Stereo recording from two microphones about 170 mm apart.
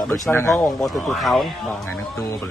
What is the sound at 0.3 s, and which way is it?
Speech, 15° left (ahead or behind).